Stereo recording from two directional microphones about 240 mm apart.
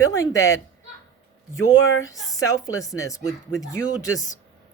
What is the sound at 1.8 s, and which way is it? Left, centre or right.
Speech, left.